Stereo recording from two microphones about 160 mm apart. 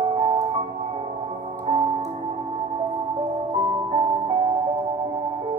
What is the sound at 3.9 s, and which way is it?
Music, 35° right (ahead or behind).